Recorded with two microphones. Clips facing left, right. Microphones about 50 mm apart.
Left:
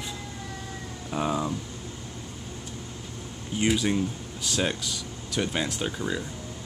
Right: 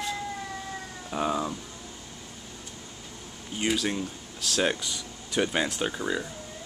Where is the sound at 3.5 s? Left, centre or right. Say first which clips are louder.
Left 3 dB; centre.